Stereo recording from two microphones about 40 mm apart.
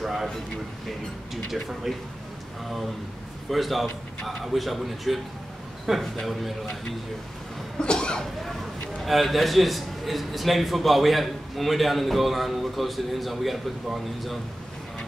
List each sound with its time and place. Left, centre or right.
0.0 s speech: centre
1.3 s a man's voice: centre
3.4 s a man's voice: centre
6.6 s speech: centre
7.8 s cough: left
9.0 s a man's voice: centre